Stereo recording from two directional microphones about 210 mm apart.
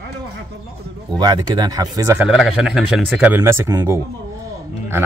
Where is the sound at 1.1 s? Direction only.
20° right (ahead or behind).